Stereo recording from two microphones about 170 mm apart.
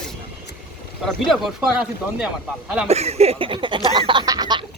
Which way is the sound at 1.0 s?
Centre (ahead or behind).